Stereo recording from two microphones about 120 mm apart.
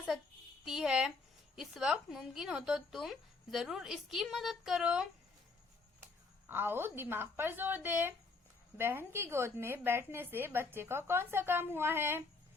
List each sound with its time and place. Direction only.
0.6 s speech: 5° right (ahead or behind)
6.5 s a woman's voice: 20° right (ahead or behind)